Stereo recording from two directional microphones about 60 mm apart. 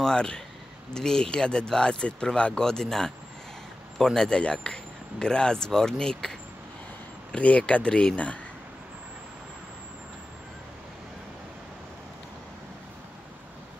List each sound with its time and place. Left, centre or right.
0.0 s speech: centre
7.3 s speech: left